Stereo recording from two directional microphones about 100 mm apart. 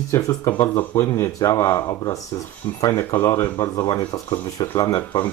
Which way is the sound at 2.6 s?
30° left (ahead or behind).